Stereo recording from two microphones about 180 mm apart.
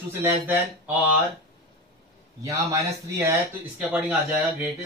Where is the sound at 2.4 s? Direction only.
15° right (ahead or behind).